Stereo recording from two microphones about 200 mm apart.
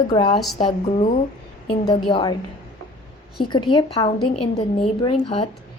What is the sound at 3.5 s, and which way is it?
Speech, 20° left (ahead or behind).